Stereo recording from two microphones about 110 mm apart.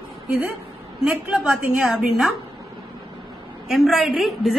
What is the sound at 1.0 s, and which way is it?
A woman's voice, 5° right (ahead or behind).